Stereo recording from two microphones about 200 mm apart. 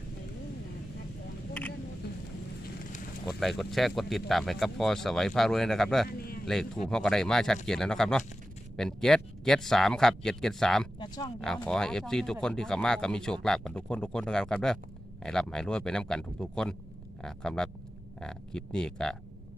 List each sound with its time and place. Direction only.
3.2 s speech: centre (ahead or behind)
6.1 s a sound: 50° left (ahead or behind)
6.4 s speech: centre (ahead or behind)
11.0 s speech: 20° left (ahead or behind)
11.3 s speech: 5° left (ahead or behind)